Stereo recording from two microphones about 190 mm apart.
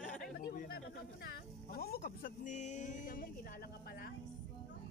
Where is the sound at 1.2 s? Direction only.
55° left (ahead or behind).